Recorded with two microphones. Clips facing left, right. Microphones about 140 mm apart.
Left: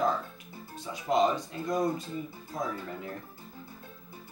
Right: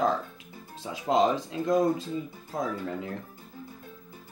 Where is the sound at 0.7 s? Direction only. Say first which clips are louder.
Right 2 dB; 90° right.